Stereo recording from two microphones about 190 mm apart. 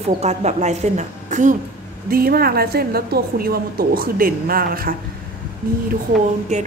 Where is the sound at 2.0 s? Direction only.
50° right (ahead or behind).